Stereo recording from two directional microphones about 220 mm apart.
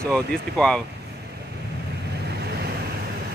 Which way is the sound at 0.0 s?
5° left (ahead or behind).